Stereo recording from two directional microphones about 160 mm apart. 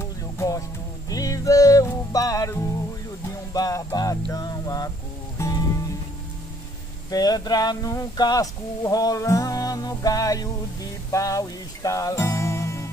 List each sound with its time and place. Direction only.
0.0 s music: 20° left (ahead or behind)
7.1 s speech: 25° left (ahead or behind)